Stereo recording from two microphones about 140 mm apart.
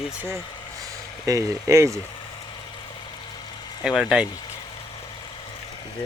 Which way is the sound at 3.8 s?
5° right (ahead or behind).